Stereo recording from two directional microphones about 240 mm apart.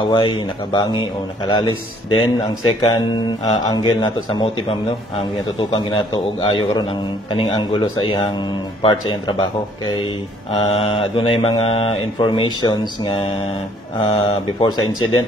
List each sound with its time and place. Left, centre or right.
0.1 s speech: centre
10.5 s speech: left